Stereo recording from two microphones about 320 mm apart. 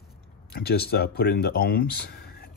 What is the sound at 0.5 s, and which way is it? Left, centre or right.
Speech, left.